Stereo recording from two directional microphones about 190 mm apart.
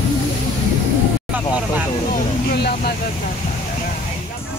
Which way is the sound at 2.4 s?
55° left (ahead or behind).